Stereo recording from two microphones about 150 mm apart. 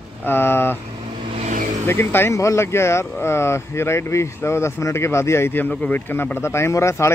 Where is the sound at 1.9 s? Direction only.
15° left (ahead or behind).